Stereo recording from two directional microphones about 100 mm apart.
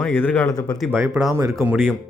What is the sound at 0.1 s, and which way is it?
Speech, 20° left (ahead or behind).